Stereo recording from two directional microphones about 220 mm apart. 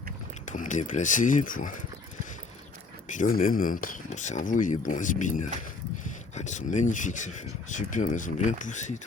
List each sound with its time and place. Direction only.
0.5 s speech: 35° left (ahead or behind)
3.1 s speech: 40° left (ahead or behind)